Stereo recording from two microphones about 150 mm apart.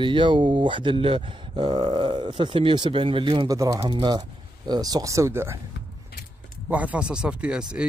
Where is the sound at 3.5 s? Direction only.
25° right (ahead or behind).